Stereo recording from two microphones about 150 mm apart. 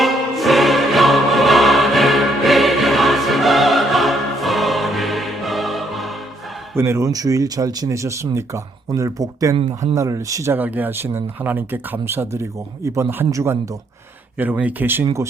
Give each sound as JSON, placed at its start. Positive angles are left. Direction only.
{"t": 0.0, "sound": "music", "side_deg": 0}
{"t": 6.7, "sound": "speech", "side_deg": -20}